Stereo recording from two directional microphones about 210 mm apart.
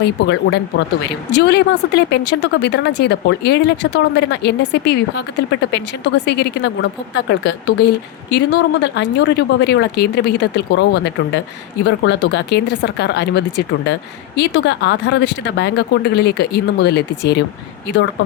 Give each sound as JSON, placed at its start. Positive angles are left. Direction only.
{"t": 0.0, "sound": "speech", "side_deg": 55}